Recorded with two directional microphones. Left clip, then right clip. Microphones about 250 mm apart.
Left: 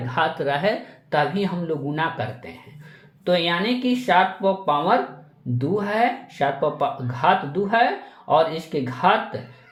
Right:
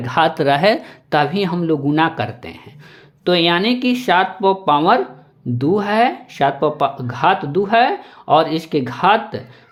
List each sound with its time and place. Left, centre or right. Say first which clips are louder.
0.0 s speech: right 7 dB; right